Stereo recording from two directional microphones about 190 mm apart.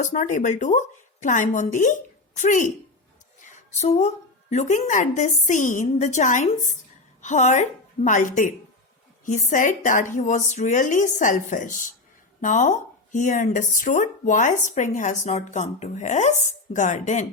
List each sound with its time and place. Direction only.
0.0 s a woman's voice: 40° left (ahead or behind)